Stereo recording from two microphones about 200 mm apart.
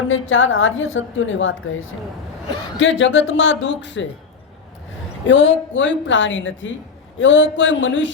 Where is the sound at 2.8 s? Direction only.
65° left (ahead or behind).